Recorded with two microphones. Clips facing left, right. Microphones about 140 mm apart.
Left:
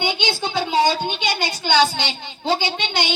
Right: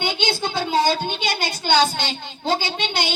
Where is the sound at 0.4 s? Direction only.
10° left (ahead or behind).